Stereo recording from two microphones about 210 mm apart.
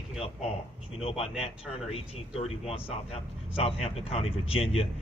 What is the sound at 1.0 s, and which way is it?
Speech, 30° left (ahead or behind).